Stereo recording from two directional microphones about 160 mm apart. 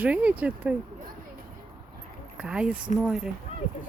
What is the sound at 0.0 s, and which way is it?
Speech, 10° right (ahead or behind).